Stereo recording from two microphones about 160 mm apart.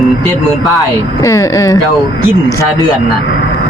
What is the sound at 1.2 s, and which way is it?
Speech, 20° left (ahead or behind).